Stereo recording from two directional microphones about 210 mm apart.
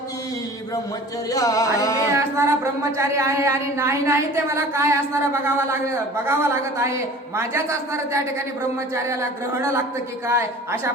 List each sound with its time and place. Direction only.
1.3 s music: 15° left (ahead or behind)
2.1 s a sound: 15° right (ahead or behind)
3.0 s a woman's voice: 15° right (ahead or behind)
10.2 s a woman's voice: 10° right (ahead or behind)